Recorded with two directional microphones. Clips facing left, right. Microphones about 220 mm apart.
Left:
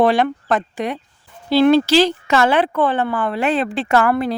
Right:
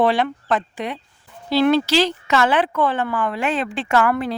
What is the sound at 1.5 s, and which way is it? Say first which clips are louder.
A woman's voice: left 4 dB; 30° left (ahead or behind).